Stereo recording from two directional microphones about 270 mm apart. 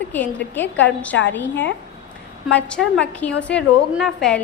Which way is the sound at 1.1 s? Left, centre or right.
Left.